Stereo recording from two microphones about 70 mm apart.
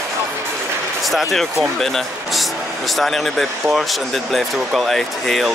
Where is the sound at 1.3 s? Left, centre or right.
Centre.